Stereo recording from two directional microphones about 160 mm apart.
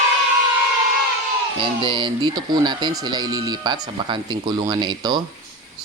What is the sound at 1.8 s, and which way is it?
Speech, 30° right (ahead or behind).